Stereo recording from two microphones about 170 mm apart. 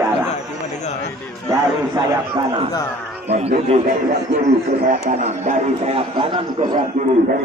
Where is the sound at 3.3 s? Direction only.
40° right (ahead or behind).